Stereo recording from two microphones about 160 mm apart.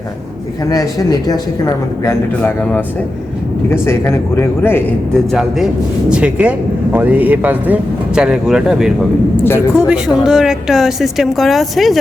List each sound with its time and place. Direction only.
0.7 s speech: 25° left (ahead or behind)
2.4 s speech: 10° left (ahead or behind)
5.3 s a woman's voice: centre (ahead or behind)